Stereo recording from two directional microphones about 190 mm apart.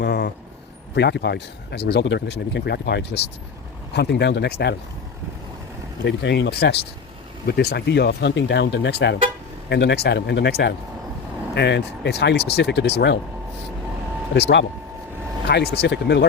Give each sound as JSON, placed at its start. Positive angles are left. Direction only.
{"t": 0.0, "sound": "vehicle", "side_deg": 60}
{"t": 0.9, "sound": "speech", "side_deg": 65}
{"t": 6.1, "sound": "speech", "side_deg": 65}
{"t": 14.3, "sound": "speech", "side_deg": 60}